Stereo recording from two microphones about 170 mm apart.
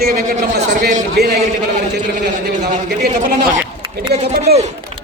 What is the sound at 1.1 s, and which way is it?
Speech, 70° right (ahead or behind).